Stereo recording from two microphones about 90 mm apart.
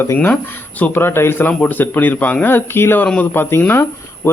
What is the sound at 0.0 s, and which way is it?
A man's voice, 20° left (ahead or behind).